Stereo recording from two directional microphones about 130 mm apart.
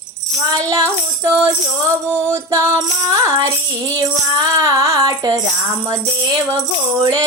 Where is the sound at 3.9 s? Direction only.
30° right (ahead or behind).